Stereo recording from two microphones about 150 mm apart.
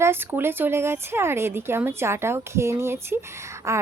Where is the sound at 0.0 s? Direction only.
15° right (ahead or behind).